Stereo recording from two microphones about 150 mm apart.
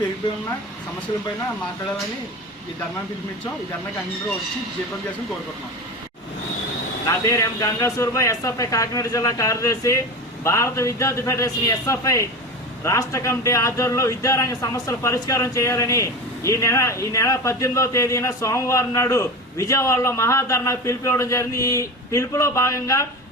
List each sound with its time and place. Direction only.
7.1 s speech: 20° left (ahead or behind)